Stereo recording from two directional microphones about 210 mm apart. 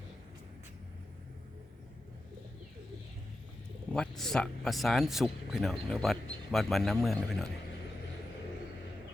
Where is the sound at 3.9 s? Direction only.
Centre (ahead or behind).